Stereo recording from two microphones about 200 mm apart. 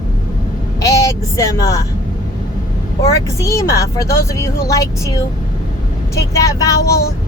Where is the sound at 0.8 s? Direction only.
15° left (ahead or behind).